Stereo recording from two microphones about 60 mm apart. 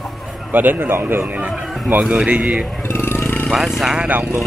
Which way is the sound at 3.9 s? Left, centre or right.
Right.